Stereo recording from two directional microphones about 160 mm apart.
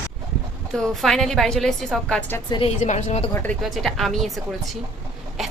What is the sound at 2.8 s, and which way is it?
Speech, 45° left (ahead or behind).